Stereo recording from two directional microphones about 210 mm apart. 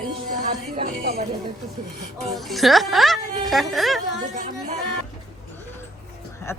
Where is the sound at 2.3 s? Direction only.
Centre (ahead or behind).